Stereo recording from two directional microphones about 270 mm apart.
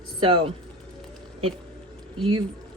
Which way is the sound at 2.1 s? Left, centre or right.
Centre.